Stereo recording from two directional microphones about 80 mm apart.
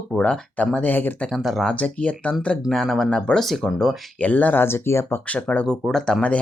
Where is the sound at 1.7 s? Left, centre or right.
Centre.